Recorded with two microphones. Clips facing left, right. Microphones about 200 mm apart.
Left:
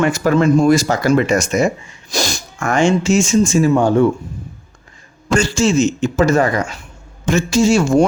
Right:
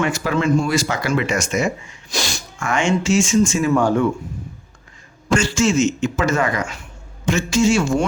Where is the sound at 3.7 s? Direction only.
25° left (ahead or behind).